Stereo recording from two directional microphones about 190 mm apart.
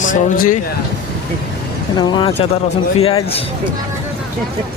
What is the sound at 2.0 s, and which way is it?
Speech, 30° left (ahead or behind).